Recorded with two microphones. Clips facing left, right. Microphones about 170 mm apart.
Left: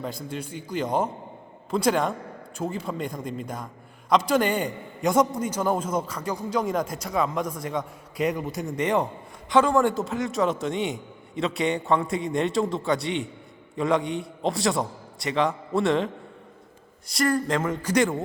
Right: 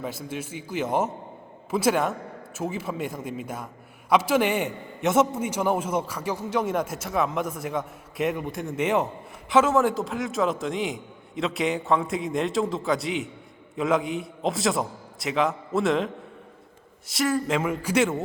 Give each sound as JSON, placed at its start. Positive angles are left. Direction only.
{"t": 0.0, "sound": "a man's voice", "side_deg": -5}
{"t": 17.1, "sound": "a man's voice", "side_deg": -5}